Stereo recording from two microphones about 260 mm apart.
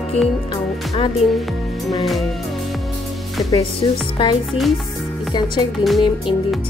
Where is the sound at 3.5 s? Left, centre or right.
Centre.